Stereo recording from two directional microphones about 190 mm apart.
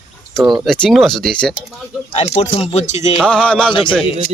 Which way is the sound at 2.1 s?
35° left (ahead or behind).